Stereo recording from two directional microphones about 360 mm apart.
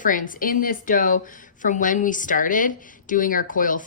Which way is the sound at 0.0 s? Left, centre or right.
Left.